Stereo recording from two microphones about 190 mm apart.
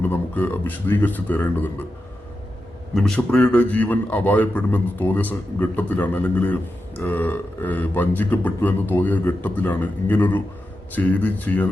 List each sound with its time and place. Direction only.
0.0 s a man's voice: 10° left (ahead or behind)
2.9 s a man's voice: centre (ahead or behind)